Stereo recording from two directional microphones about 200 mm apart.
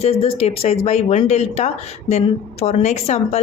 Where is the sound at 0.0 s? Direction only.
30° left (ahead or behind).